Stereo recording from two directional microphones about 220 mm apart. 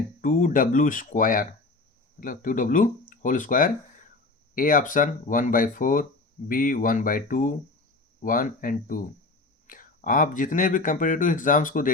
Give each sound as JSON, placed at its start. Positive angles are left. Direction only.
{"t": 0.2, "sound": "speech", "side_deg": 40}